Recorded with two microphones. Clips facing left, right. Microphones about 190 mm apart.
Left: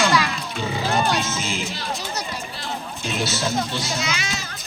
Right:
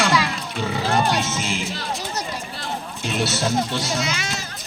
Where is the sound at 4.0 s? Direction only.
50° right (ahead or behind).